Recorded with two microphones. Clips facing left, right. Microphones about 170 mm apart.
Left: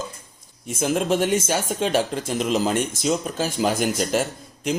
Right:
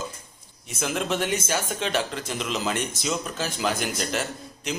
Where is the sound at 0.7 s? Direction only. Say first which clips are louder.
Left 6 dB; 45° left (ahead or behind).